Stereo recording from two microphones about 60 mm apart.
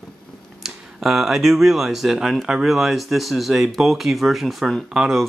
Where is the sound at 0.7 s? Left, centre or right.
Centre.